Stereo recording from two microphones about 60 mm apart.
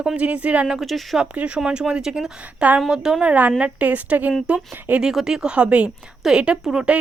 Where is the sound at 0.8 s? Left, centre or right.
Centre.